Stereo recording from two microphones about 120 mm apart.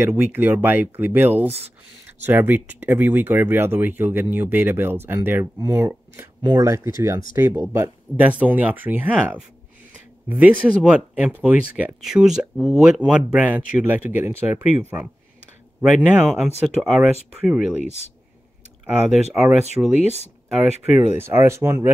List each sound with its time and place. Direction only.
0.0 s speech: 20° right (ahead or behind)
19.4 s speech: 10° right (ahead or behind)
21.2 s speech: 20° right (ahead or behind)